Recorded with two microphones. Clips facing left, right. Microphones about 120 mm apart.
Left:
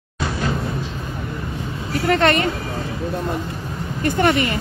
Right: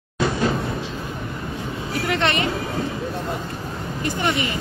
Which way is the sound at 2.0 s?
45° left (ahead or behind).